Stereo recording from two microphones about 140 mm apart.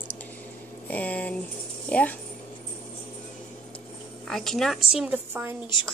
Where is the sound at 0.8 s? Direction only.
10° left (ahead or behind).